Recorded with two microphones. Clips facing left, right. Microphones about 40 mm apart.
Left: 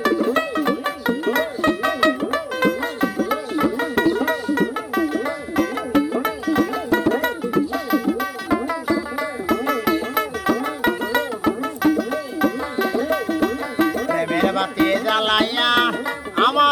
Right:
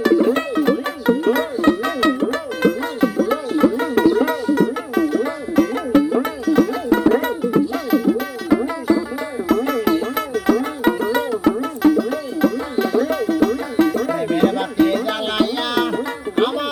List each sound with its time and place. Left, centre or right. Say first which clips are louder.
0.2 s music: right 3 dB; centre
0.5 s music: right 3 dB; centre
8.6 s music: right 3 dB; centre
9.5 s music: right 3 dB; centre
14.8 s music: left 1 dB; left
16.4 s music: left 3 dB; left